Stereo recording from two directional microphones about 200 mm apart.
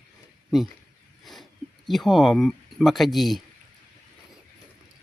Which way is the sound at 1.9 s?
Centre (ahead or behind).